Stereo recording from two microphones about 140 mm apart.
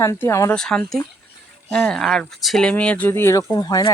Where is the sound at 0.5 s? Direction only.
5° left (ahead or behind).